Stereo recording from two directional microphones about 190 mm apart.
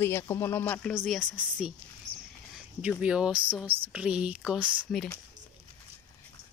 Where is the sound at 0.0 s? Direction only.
15° left (ahead or behind).